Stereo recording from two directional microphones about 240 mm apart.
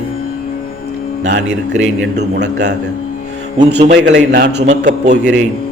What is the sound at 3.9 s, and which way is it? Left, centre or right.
Speech, right.